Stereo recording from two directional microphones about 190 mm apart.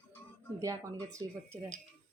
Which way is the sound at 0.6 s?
15° right (ahead or behind).